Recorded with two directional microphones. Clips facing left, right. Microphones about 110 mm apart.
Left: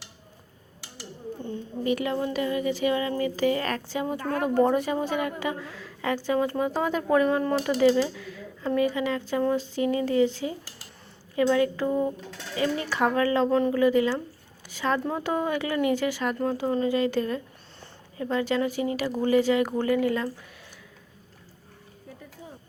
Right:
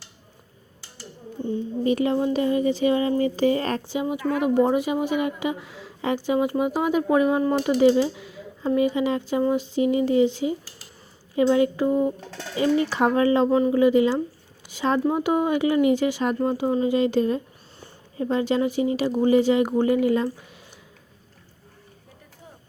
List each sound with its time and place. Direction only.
1.8 s speech: 30° right (ahead or behind)
4.4 s a woman's voice: 15° right (ahead or behind)
7.8 s a woman's voice: 25° right (ahead or behind)